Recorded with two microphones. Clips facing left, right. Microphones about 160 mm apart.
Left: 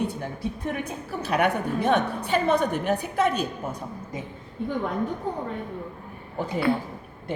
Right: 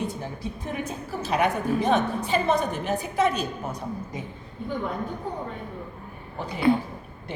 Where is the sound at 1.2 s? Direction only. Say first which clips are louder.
Left 1 dB; 60° left (ahead or behind).